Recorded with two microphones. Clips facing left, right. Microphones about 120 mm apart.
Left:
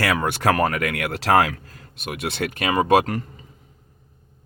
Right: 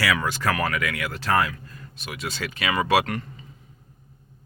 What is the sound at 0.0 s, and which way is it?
Speech, 55° left (ahead or behind).